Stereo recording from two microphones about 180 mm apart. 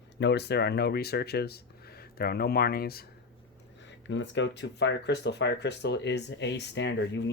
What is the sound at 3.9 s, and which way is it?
Speech, 85° left.